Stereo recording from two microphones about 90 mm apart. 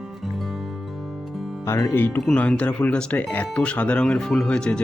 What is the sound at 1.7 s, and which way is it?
Speech, 35° left (ahead or behind).